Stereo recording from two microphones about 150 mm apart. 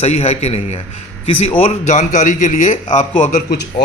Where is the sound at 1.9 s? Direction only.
50° left (ahead or behind).